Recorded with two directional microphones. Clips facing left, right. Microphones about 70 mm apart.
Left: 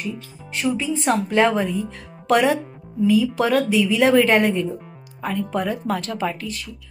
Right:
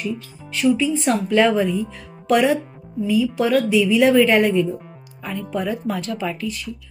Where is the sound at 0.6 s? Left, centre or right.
Left.